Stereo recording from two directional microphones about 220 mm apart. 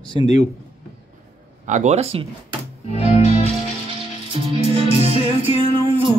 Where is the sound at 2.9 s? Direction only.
30° left (ahead or behind).